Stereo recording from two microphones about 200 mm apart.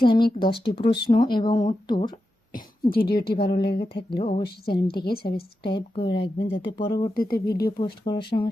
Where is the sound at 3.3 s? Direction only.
30° left (ahead or behind).